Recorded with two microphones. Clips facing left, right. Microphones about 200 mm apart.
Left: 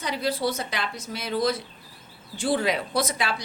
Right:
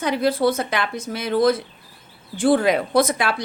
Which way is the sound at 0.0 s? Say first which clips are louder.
Right 7 dB; 55° right (ahead or behind).